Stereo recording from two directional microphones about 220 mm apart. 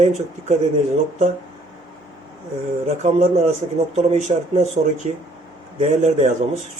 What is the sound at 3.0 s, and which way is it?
Speech, 30° right (ahead or behind).